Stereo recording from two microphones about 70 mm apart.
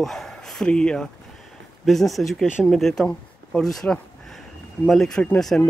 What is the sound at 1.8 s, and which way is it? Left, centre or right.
Speech, centre.